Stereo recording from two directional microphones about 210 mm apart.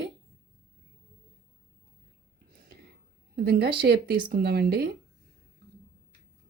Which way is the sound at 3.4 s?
50° right (ahead or behind).